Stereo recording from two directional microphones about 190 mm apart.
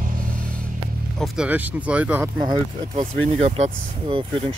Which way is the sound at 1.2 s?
5° right (ahead or behind).